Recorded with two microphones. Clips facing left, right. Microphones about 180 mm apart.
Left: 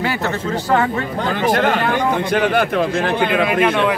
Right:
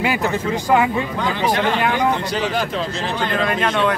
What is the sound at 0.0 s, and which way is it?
Speech, 15° right (ahead or behind).